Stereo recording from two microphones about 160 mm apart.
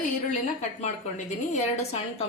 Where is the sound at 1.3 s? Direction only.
45° left (ahead or behind).